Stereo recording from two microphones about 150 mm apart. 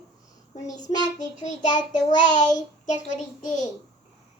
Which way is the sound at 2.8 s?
55° left (ahead or behind).